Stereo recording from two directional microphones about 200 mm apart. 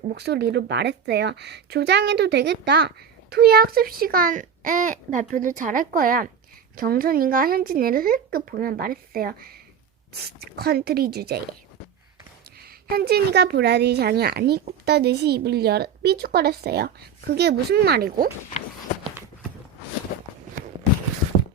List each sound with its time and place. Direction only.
0.1 s a woman's voice: 55° right (ahead or behind)
12.9 s a woman's voice: 50° right (ahead or behind)